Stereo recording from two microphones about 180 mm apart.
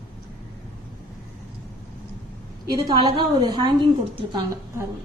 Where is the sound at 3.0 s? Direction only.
25° right (ahead or behind).